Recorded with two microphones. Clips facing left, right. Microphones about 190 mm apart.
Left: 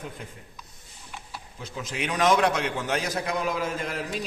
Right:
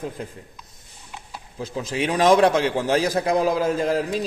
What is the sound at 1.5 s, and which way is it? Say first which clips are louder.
A man's voice: right 8 dB; 35° right (ahead or behind).